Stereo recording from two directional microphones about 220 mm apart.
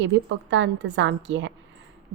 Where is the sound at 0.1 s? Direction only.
55° right (ahead or behind).